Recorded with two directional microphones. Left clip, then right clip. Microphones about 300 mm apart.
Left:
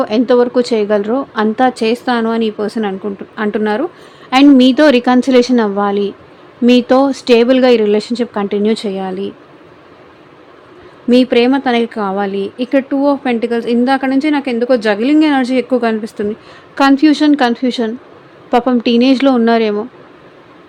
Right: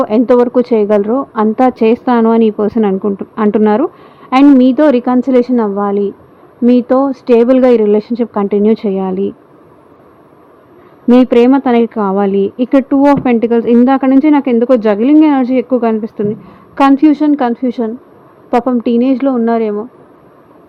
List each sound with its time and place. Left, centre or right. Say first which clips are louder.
0.0 s speech: right 2 dB; centre
11.1 s speech: right 3 dB; centre